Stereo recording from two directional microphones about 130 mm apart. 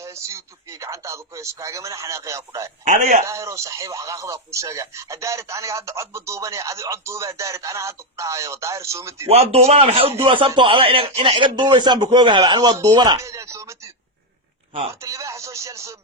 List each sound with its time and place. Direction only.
0.0 s speech: 20° right (ahead or behind)
2.8 s a man's voice: 80° right
3.2 s speech: 25° right (ahead or behind)
9.2 s a man's voice: 50° right (ahead or behind); by 13.1 s 35° right (ahead or behind)
13.1 s speech: 25° right (ahead or behind)
15.0 s speech: 25° right (ahead or behind)